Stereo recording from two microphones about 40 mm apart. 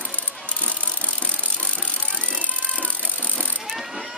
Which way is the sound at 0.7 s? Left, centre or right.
Left.